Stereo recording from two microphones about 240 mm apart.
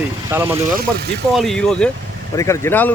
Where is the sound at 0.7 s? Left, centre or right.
Right.